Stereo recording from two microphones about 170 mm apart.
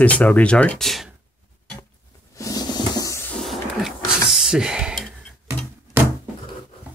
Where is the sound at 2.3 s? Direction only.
20° left (ahead or behind).